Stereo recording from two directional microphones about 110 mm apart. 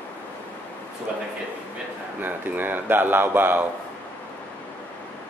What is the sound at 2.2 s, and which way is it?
Speech, 15° right (ahead or behind).